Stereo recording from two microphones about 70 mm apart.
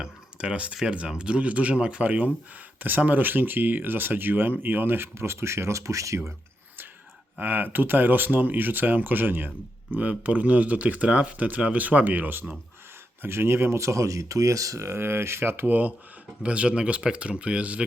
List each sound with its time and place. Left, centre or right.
0.0 s speech: centre; by 6.3 s right
7.3 s speech: right